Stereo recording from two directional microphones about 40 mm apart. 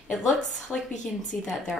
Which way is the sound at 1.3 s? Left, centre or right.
Left.